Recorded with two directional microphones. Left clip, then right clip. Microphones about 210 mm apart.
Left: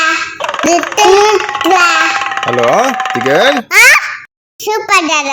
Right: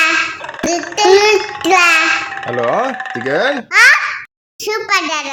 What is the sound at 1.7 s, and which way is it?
Babbling, 20° left (ahead or behind).